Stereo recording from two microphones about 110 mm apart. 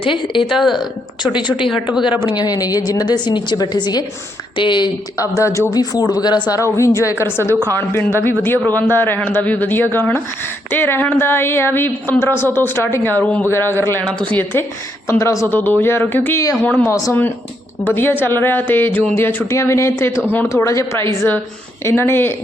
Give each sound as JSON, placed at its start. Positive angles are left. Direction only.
{"t": 0.0, "sound": "speech", "side_deg": 50}
{"t": 0.4, "sound": "speech", "side_deg": 0}
{"t": 1.2, "sound": "a woman's voice", "side_deg": 45}
{"t": 5.1, "sound": "a woman's voice", "side_deg": 30}
{"t": 6.7, "sound": "a woman's voice", "side_deg": 25}
{"t": 14.0, "sound": "a man's voice", "side_deg": 10}
{"t": 15.2, "sound": "a woman's voice", "side_deg": 25}
{"t": 15.5, "sound": "a woman's voice", "side_deg": 15}
{"t": 16.8, "sound": "a woman's voice", "side_deg": 30}